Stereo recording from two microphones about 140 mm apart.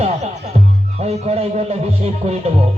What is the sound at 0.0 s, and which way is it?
Music, 50° right (ahead or behind).